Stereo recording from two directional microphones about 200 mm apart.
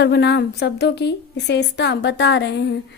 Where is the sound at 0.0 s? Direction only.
60° left (ahead or behind).